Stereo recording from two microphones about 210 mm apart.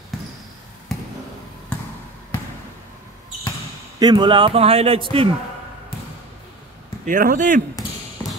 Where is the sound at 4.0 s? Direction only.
20° right (ahead or behind).